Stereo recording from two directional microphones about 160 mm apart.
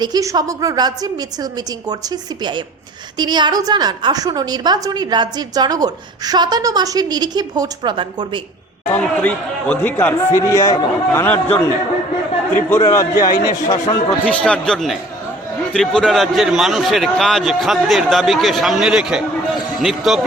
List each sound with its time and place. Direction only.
0.0 s a woman's voice: 25° right (ahead or behind)
8.9 s speech: 10° left (ahead or behind)
12.6 s a man's voice: 15° left (ahead or behind)
14.3 s a man's voice: 5° left (ahead or behind)